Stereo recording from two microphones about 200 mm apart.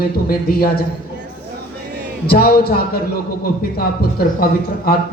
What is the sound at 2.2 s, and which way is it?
A man's voice, 50° left (ahead or behind).